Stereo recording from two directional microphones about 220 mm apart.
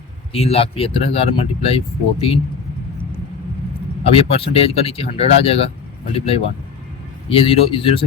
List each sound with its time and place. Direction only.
0.3 s speech: 25° left (ahead or behind)
4.1 s speech: 25° left (ahead or behind)